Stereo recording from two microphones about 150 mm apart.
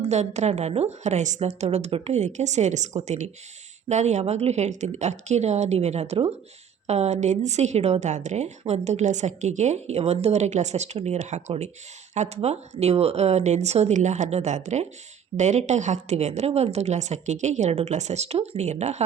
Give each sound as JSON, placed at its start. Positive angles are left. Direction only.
{"t": 0.0, "sound": "a woman's voice", "side_deg": -50}